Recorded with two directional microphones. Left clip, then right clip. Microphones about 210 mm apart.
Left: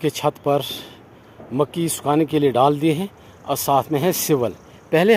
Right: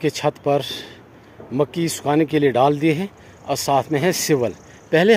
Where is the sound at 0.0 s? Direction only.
5° left (ahead or behind).